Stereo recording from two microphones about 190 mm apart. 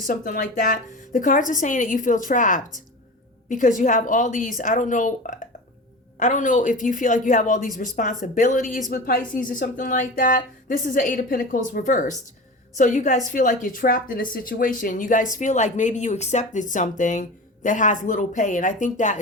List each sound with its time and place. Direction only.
0.0 s a woman's voice: 45° left (ahead or behind)